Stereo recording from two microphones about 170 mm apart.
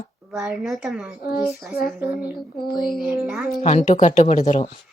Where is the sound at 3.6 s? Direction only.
45° left (ahead or behind).